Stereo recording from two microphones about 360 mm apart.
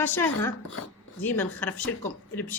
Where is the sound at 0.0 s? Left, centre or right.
Centre.